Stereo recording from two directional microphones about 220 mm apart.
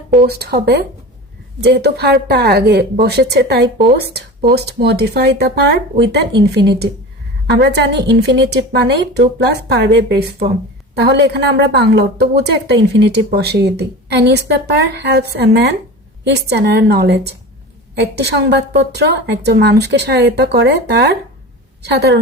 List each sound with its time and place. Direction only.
0.1 s a woman's voice: 40° right (ahead or behind)